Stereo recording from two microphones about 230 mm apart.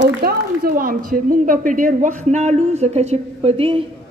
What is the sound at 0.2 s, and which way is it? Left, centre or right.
A woman's voice, right.